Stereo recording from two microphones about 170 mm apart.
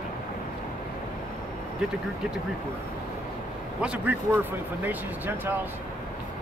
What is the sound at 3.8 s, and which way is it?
Speech, 5° right (ahead or behind).